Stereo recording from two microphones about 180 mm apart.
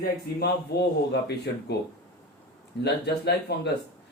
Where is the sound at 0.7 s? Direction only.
65° left (ahead or behind).